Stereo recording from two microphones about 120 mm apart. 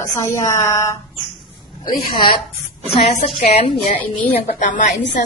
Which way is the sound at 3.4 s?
60° left (ahead or behind).